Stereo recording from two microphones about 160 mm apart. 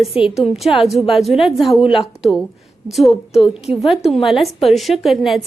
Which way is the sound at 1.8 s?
35° left (ahead or behind).